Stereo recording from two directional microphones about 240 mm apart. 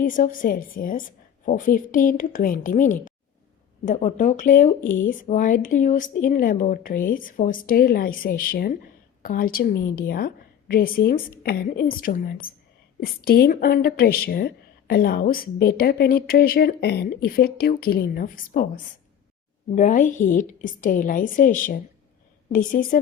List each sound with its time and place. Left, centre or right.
0.0 s a woman's voice: left
19.7 s a woman's voice: left